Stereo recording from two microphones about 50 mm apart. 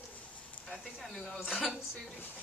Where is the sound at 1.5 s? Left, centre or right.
Centre.